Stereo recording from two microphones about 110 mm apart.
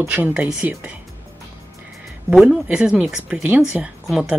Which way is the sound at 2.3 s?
5° right (ahead or behind).